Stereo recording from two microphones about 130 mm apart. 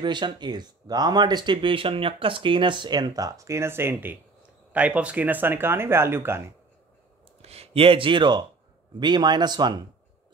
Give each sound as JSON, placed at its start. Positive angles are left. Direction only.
{"t": 0.0, "sound": "speech", "side_deg": -35}
{"t": 7.4, "sound": "speech", "side_deg": -50}